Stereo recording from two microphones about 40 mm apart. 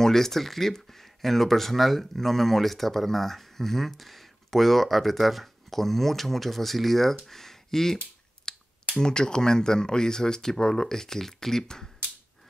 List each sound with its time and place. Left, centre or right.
0.0 s speech: centre
8.5 s finger snapping: centre
9.0 s speech: centre